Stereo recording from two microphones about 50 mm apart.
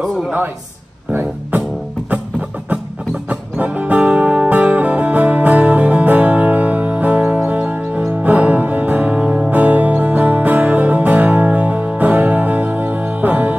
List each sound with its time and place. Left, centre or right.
3.3 s music: right